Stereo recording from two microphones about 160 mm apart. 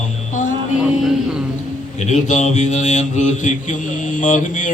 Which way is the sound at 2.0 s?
50° left (ahead or behind).